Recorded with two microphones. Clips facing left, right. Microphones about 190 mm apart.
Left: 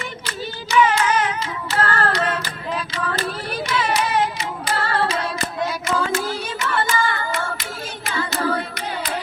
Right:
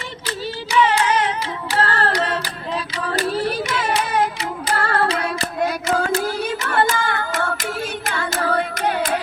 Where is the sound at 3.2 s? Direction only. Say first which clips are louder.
Right 6 dB; 35° right (ahead or behind).